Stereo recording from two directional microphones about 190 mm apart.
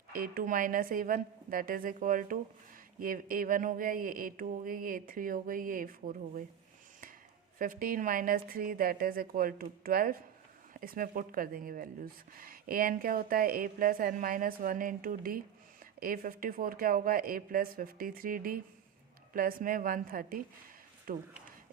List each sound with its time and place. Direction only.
0.1 s speech: 50° right (ahead or behind)
7.6 s speech: 45° right (ahead or behind)